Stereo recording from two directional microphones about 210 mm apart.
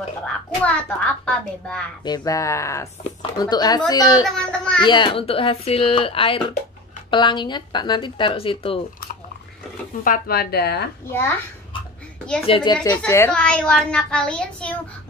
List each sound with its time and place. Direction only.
0.7 s a child's voice: 5° left (ahead or behind)
2.0 s speech: 15° left (ahead or behind)
4.3 s a child's voice: 5° left (ahead or behind)
4.8 s speech: 20° left (ahead or behind)
10.0 s a woman's voice: 45° left (ahead or behind)
11.1 s speech: 10° left (ahead or behind)
12.4 s speech: 25° left (ahead or behind)
12.8 s a child's voice: 15° left (ahead or behind)